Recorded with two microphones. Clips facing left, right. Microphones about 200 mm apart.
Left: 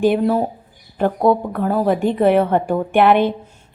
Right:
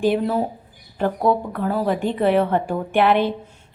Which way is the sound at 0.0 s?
55° left (ahead or behind).